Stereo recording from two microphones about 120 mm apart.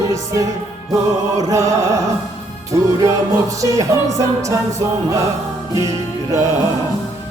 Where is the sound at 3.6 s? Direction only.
30° right (ahead or behind).